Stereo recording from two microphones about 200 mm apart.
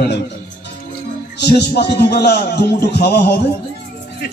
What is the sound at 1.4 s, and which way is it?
A man's voice, 55° left (ahead or behind).